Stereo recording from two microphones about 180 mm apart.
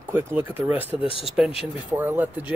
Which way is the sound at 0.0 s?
10° right (ahead or behind).